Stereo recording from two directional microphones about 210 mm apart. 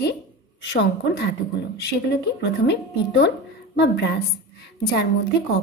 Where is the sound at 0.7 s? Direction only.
55° left (ahead or behind).